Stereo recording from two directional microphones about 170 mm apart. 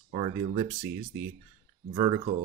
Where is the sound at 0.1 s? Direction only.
30° right (ahead or behind).